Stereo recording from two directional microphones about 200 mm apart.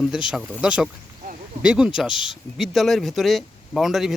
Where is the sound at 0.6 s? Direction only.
5° right (ahead or behind).